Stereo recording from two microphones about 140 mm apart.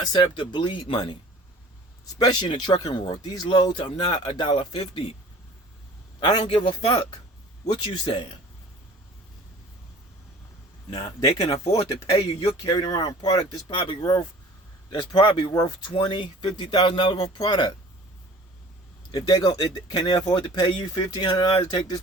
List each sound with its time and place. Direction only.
0.1 s speech: 35° left (ahead or behind)
6.1 s speech: 35° left (ahead or behind)
11.2 s speech: 30° left (ahead or behind)
12.6 s speech: 30° left (ahead or behind)
19.1 s speech: 30° left (ahead or behind)